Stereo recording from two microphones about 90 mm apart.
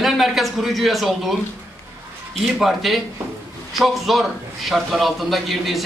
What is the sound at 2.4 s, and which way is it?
A man's voice, centre (ahead or behind).